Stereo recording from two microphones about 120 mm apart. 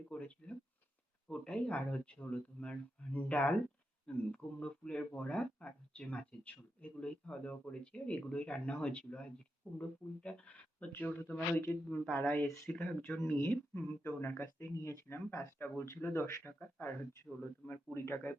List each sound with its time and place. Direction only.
0.1 s speech: 10° left (ahead or behind)
12.3 s speech: 25° left (ahead or behind)
12.7 s speech: 10° left (ahead or behind)
13.1 s speech: 20° left (ahead or behind)